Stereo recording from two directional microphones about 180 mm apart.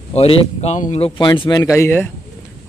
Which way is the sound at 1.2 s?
25° left (ahead or behind).